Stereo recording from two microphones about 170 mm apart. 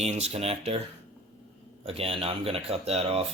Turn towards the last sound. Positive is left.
turn(degrees=-35)  # may be behind; listen again after turning